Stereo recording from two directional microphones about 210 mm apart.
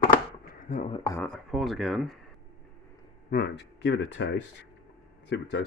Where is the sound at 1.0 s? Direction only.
10° left (ahead or behind).